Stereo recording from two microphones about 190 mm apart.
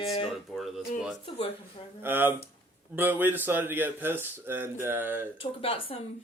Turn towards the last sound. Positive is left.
turn(degrees=30)  # may be behind; listen again after turning